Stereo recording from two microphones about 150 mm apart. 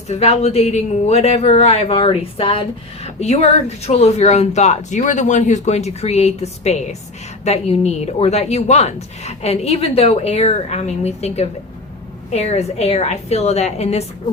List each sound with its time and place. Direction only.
0.1 s speech: 45° left (ahead or behind)